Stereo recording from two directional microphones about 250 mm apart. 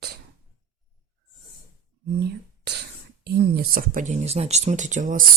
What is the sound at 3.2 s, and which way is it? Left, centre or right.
Speech, right.